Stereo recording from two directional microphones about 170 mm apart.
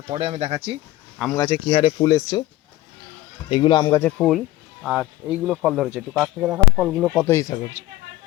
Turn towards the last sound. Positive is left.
turn(degrees=15)  # may be behind; listen again after turning